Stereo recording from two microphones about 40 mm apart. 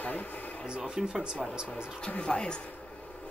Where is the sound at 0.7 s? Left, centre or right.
Centre.